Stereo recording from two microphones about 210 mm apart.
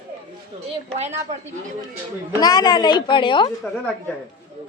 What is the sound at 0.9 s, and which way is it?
Speech, 30° right (ahead or behind).